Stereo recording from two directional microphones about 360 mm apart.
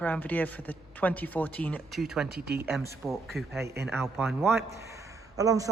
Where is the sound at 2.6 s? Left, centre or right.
Centre.